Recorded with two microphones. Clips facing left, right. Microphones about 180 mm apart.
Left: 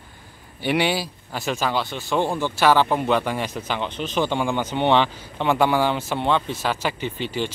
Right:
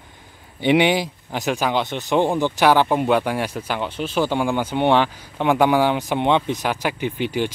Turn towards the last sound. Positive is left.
turn(degrees=-15)  # may be behind; listen again after turning